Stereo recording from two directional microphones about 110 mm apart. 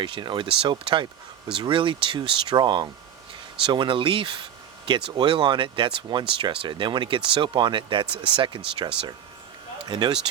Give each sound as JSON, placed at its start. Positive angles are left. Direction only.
{"t": 0.0, "sound": "speech", "side_deg": -45}
{"t": 9.9, "sound": "speech", "side_deg": -40}